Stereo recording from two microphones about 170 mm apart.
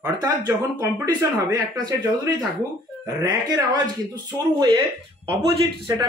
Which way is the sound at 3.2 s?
25° right (ahead or behind).